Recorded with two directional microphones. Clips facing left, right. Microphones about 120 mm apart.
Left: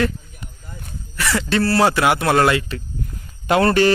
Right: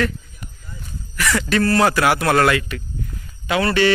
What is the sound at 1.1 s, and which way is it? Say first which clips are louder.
A man's voice: even; 25° left (ahead or behind).